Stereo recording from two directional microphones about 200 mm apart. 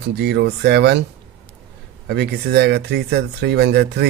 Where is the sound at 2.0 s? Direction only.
55° right (ahead or behind).